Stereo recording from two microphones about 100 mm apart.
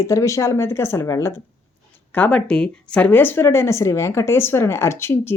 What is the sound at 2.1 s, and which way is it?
Speech, 15° left (ahead or behind).